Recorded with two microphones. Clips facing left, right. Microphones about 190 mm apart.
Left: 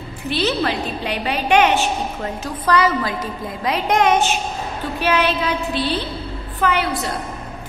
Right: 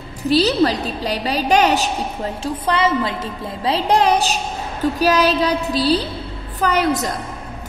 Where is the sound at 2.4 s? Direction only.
25° right (ahead or behind).